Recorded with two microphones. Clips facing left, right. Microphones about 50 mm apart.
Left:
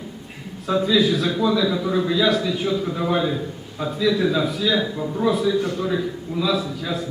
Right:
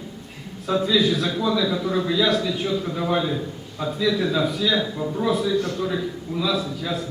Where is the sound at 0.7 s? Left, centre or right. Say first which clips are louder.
Left 2 dB; centre.